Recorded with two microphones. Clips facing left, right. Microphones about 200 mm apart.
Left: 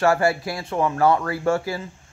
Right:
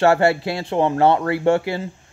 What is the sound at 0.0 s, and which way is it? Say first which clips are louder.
Speech: right 4 dB; 25° right (ahead or behind).